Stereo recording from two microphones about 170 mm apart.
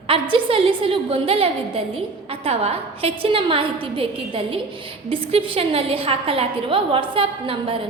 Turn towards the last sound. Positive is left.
turn(degrees=-30)  # may be behind; listen again after turning